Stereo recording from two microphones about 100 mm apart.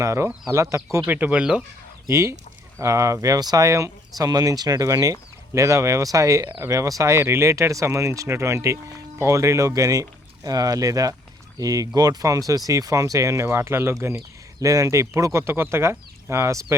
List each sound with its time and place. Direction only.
0.0 s speech: 30° right (ahead or behind)
1.0 s speech: 20° right (ahead or behind)
2.0 s speech: 30° right (ahead or behind)